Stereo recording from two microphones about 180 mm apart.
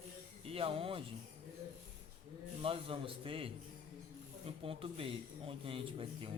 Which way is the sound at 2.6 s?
30° right (ahead or behind).